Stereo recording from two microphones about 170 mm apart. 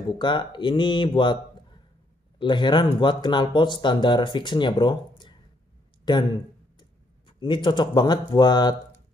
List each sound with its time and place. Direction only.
0.2 s speech: 25° left (ahead or behind)